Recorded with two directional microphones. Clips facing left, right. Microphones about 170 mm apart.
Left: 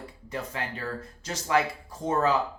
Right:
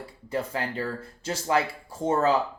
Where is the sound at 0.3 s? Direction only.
30° right (ahead or behind).